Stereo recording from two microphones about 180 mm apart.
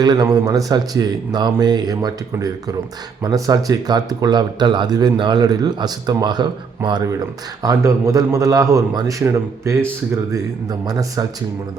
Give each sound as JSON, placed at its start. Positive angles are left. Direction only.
{"t": 0.0, "sound": "a man's voice", "side_deg": -20}